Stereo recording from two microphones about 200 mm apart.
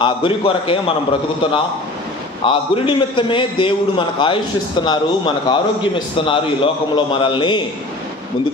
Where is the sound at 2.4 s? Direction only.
25° left (ahead or behind).